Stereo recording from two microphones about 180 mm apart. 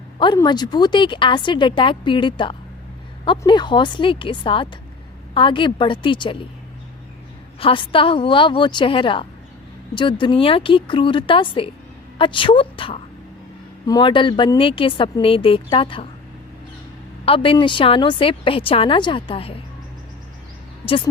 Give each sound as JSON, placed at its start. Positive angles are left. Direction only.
{"t": 0.2, "sound": "a woman's voice", "side_deg": 25}
{"t": 7.6, "sound": "a woman's voice", "side_deg": 30}
{"t": 17.2, "sound": "a woman's voice", "side_deg": 30}
{"t": 20.8, "sound": "a woman's voice", "side_deg": 30}